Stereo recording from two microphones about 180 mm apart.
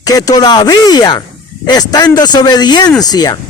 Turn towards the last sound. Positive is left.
turn(degrees=20)  # may be behind; listen again after turning